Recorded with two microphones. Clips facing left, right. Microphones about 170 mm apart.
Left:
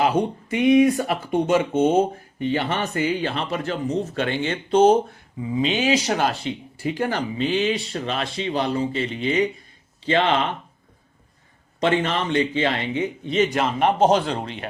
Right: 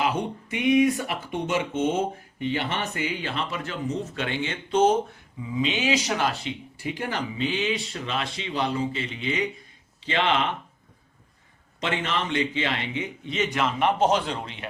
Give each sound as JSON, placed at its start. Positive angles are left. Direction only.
{"t": 0.0, "sound": "speech", "side_deg": 35}
{"t": 11.8, "sound": "speech", "side_deg": 35}